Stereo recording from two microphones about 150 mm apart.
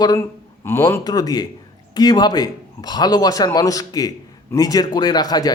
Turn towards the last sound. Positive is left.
turn(degrees=25)  # may be behind; listen again after turning